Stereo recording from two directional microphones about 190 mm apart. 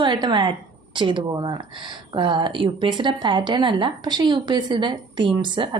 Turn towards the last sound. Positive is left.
turn(degrees=-25)  # may be behind; listen again after turning